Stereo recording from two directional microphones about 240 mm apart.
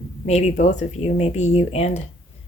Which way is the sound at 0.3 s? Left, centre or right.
Left.